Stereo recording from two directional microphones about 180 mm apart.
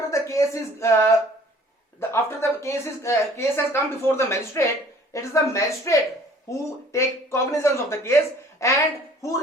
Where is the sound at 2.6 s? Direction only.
15° left (ahead or behind).